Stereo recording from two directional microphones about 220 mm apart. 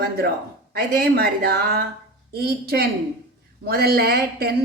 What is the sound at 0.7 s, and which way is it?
A woman's voice, 45° right (ahead or behind).